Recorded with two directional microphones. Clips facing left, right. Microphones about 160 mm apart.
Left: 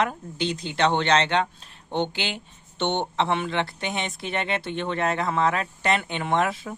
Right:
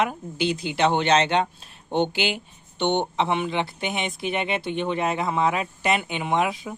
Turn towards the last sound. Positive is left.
turn(degrees=-5)  # may be behind; listen again after turning